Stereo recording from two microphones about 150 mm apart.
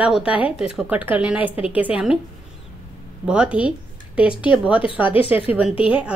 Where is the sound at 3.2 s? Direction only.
5° right (ahead or behind).